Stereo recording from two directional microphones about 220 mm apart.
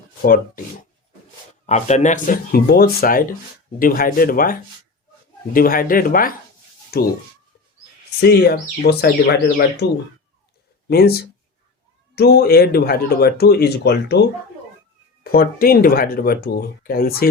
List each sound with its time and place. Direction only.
0.2 s speech: 40° left (ahead or behind)
1.6 s speech: 30° left (ahead or behind)
8.2 s speech: 45° left (ahead or behind)
10.8 s speech: 45° left (ahead or behind)
15.2 s speech: 40° left (ahead or behind)